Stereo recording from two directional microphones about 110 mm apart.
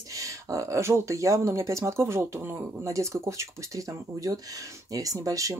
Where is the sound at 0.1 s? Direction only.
30° right (ahead or behind).